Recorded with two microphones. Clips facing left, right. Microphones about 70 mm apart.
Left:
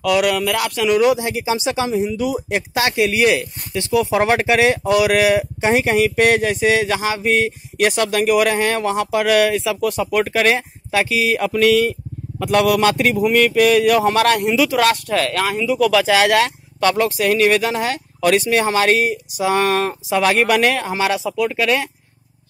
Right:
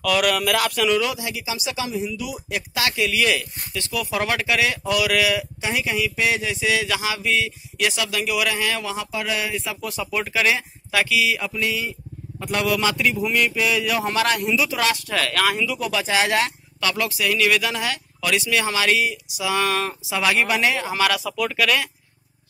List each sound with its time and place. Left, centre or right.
0.0 s speech: centre
0.9 s speech: left
10.9 s speech: left
11.1 s a sound: left
11.5 s a man's voice: left
15.8 s speech: left
16.8 s speech: left
20.9 s speech: left